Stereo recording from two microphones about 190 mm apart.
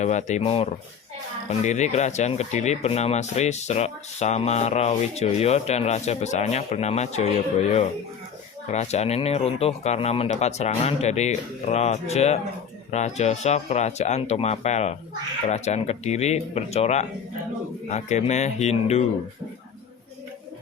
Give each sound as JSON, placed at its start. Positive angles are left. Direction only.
{"t": 0.0, "sound": "speech", "side_deg": 40}